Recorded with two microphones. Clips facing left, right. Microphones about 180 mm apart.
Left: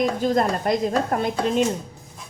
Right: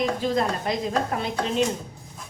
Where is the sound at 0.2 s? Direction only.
45° left (ahead or behind).